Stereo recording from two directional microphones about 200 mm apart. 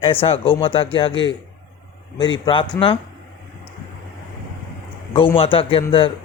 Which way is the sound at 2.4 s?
25° left (ahead or behind).